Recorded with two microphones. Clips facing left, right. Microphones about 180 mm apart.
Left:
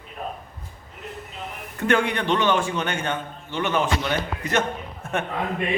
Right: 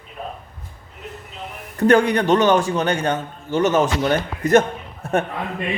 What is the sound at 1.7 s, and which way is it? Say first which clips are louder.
A man's voice: right 7 dB; 40° right (ahead or behind).